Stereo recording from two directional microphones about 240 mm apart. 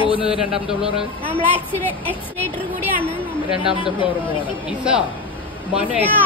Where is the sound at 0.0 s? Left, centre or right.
Left.